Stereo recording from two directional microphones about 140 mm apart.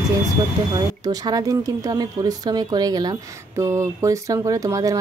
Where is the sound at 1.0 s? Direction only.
25° right (ahead or behind).